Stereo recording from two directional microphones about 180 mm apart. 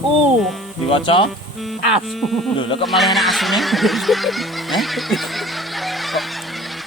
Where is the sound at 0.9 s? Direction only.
30° left (ahead or behind).